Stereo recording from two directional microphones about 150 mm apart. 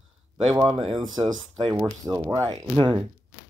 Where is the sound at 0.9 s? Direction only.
30° right (ahead or behind).